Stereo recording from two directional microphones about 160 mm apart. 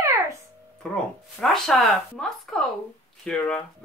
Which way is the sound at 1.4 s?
Centre (ahead or behind).